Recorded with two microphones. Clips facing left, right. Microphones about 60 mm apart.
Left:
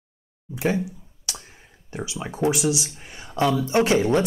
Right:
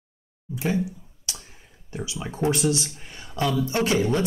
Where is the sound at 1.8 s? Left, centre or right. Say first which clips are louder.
Left 1 dB; left.